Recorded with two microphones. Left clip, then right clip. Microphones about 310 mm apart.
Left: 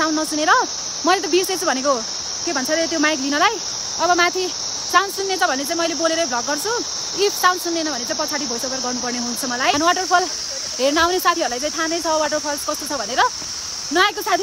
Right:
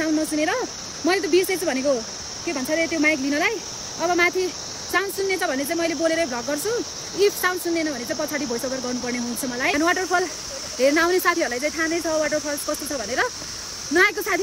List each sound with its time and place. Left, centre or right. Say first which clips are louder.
0.0 s speech: left 3 dB; centre
2.4 s speech: left 3 dB; left
3.1 s speech: left 3 dB; centre
9.6 s speech: left 3 dB; centre